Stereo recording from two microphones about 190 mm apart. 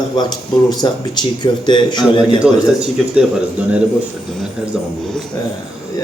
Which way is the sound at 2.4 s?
5° right (ahead or behind).